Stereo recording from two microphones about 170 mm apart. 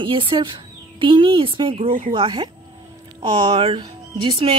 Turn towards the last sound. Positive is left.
turn(degrees=-30)  # may be behind; listen again after turning